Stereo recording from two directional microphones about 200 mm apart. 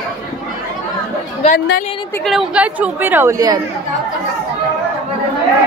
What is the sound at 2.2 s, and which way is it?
A woman's voice, 5° right (ahead or behind).